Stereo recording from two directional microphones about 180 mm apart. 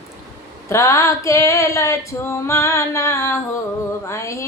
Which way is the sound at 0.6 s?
15° left (ahead or behind).